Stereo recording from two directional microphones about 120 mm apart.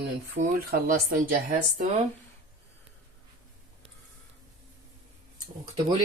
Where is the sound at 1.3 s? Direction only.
90° right.